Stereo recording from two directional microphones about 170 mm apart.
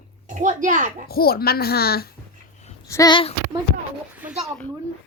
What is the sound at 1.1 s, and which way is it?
A woman's voice, 65° left (ahead or behind).